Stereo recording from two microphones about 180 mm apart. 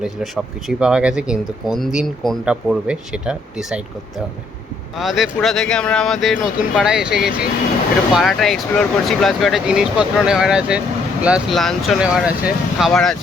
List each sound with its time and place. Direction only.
0.0 s speech: 5° right (ahead or behind)
4.9 s speech: centre (ahead or behind)